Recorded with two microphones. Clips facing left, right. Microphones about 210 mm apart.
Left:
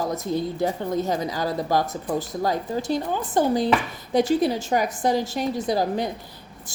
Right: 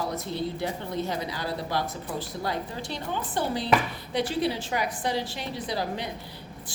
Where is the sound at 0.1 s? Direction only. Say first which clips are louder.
Left 5 dB; 45° left (ahead or behind).